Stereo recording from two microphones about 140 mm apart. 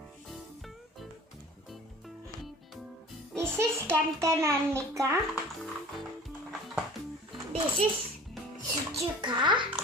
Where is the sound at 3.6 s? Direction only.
20° right (ahead or behind).